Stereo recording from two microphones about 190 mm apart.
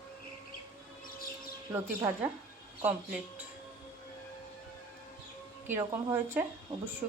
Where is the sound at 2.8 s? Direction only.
10° right (ahead or behind).